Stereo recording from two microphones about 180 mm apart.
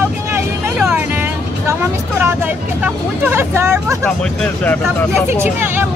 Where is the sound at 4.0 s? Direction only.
5° left (ahead or behind).